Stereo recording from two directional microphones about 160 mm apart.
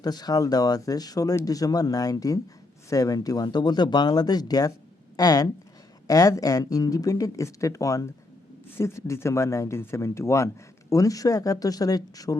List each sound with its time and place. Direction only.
0.0 s speech: 25° left (ahead or behind)